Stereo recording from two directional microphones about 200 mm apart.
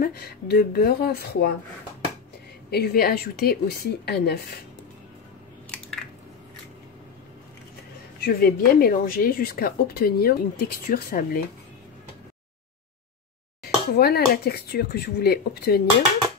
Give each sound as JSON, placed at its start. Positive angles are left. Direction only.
{"t": 0.0, "sound": "speech", "side_deg": 50}
{"t": 2.7, "sound": "speech", "side_deg": 50}
{"t": 8.2, "sound": "speech", "side_deg": 50}
{"t": 13.9, "sound": "speech", "side_deg": 50}